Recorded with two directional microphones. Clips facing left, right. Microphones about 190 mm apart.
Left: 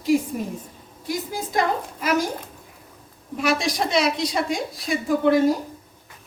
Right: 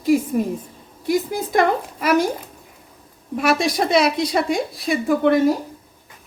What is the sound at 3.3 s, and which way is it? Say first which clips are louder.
A woman's voice: right 4 dB; 55° right (ahead or behind).